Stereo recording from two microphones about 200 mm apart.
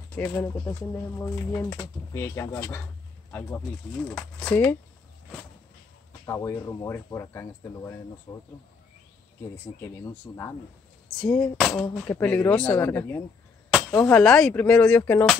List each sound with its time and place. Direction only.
0.1 s speech: 10° left (ahead or behind)
6.2 s speech: 15° left (ahead or behind)
10.3 s speech: 15° left (ahead or behind)